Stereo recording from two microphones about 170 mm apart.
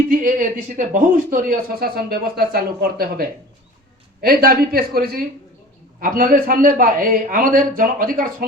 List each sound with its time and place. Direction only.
0.1 s speech: 55° right (ahead or behind)